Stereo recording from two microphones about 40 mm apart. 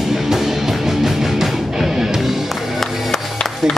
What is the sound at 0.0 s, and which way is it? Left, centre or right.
Music, centre.